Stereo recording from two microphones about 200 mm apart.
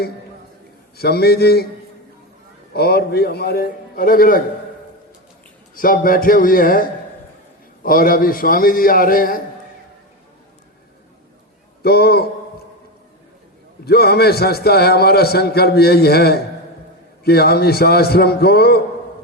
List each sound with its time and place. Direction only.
0.9 s a man's voice: 50° left (ahead or behind)
2.7 s a man's voice: 55° left (ahead or behind)
5.7 s a man's voice: 45° left (ahead or behind)
7.9 s a man's voice: 45° left (ahead or behind)
11.8 s a man's voice: 50° left (ahead or behind)
13.8 s a man's voice: 50° left (ahead or behind)